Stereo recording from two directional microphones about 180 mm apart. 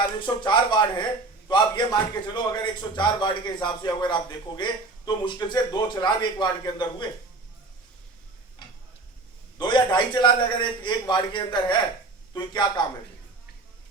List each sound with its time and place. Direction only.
0.2 s a man's voice: 25° left (ahead or behind)
9.6 s a man's voice: 25° left (ahead or behind)